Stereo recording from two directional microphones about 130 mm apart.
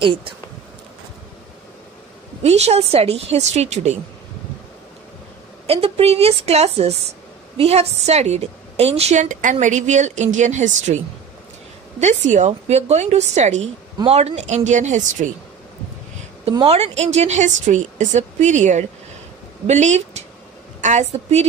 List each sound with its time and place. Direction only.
0.0 s speech: 40° right (ahead or behind)
2.4 s a woman's voice: 55° right (ahead or behind)
5.7 s a woman's voice: 50° right (ahead or behind); by 11.0 s 65° right (ahead or behind)
12.0 s a woman's voice: 65° right (ahead or behind)
16.6 s a woman's voice: 55° right (ahead or behind)